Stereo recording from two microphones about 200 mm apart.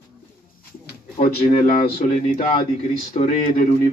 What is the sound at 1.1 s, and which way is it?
Speech, 40° left (ahead or behind).